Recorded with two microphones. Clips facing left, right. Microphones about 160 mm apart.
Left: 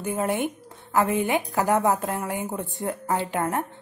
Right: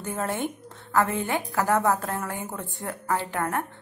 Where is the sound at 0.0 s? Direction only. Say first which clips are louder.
Left 3 dB; 15° left (ahead or behind).